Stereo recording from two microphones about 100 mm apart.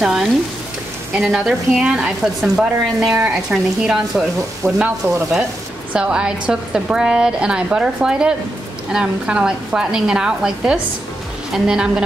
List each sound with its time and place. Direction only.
0.0 s a woman's voice: 5° right (ahead or behind)
4.6 s frying: 10° left (ahead or behind)
5.0 s stir: 25° right (ahead or behind)
5.9 s a woman's voice: 10° right (ahead or behind)